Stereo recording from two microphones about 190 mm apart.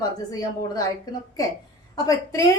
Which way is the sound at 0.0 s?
20° left (ahead or behind).